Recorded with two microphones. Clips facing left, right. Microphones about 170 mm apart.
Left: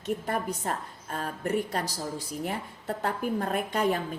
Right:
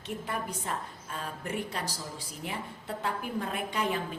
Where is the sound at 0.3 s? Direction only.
45° left (ahead or behind).